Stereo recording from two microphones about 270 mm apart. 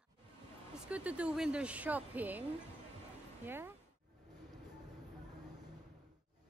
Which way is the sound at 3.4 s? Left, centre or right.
Centre.